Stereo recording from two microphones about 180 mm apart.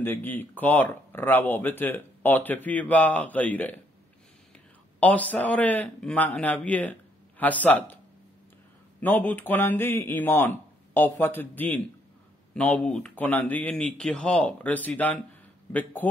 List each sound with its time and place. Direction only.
0.0 s speech: 10° left (ahead or behind)
5.0 s speech: 10° left (ahead or behind)
9.0 s speech: 10° left (ahead or behind)